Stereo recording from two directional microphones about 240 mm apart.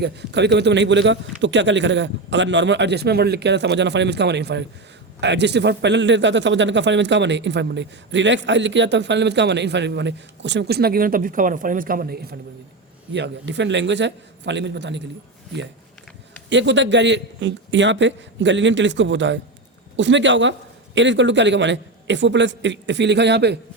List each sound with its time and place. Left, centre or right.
0.0 s a man's voice: right
16.5 s a man's voice: right